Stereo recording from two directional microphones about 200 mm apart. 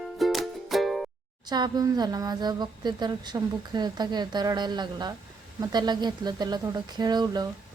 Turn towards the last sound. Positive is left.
turn(degrees=-20)  # may be behind; listen again after turning